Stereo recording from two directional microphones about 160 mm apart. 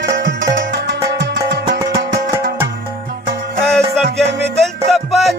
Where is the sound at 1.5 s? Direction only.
90° right.